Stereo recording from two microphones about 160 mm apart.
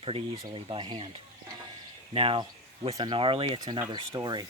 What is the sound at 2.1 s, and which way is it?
Speech, 35° right (ahead or behind).